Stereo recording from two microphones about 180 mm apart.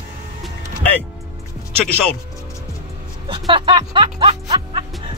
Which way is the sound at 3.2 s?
25° right (ahead or behind).